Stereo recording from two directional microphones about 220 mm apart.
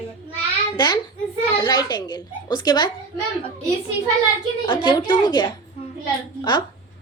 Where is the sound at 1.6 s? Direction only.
20° left (ahead or behind).